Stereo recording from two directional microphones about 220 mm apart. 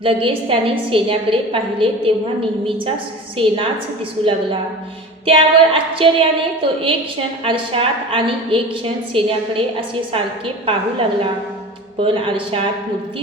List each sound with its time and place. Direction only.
0.0 s a woman's voice: 25° right (ahead or behind)
5.2 s a woman's voice: 25° right (ahead or behind)
11.9 s a woman's voice: 25° right (ahead or behind)